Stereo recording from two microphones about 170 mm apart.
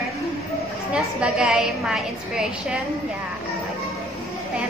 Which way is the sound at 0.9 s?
5° right (ahead or behind).